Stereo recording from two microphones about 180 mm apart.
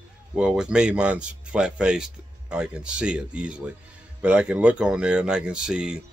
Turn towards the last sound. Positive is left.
turn(degrees=-5)  # may be behind; listen again after turning